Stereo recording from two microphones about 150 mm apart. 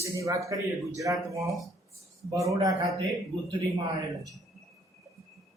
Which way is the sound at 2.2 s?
20° right (ahead or behind).